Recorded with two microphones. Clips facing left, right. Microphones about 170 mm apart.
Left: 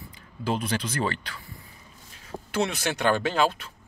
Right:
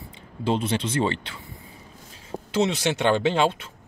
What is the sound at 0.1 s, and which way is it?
Speech, 25° right (ahead or behind).